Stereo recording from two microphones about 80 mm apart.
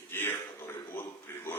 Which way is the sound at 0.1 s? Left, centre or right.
Left.